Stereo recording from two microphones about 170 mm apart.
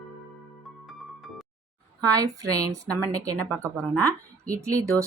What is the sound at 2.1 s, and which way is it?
Speech, 20° right (ahead or behind).